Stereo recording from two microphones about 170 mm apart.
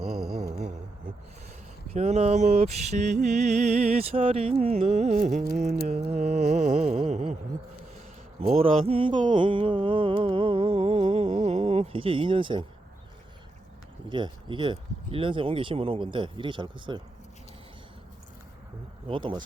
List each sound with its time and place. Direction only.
0.0 s mantra: centre (ahead or behind)
1.9 s mantra: 40° right (ahead or behind)
8.4 s mantra: 35° right (ahead or behind)
14.1 s speech: 30° right (ahead or behind)
19.0 s speech: 30° right (ahead or behind)